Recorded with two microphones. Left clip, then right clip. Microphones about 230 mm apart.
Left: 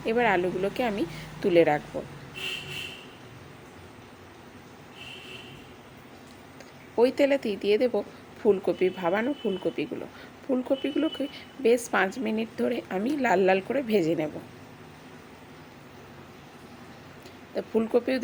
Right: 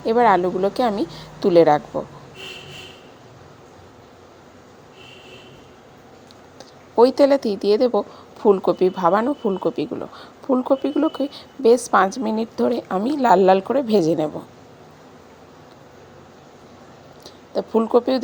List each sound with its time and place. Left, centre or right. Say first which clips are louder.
0.0 s a woman's voice: right 8 dB; right
6.9 s a woman's voice: right 8 dB; right
17.5 s a woman's voice: right 8 dB; right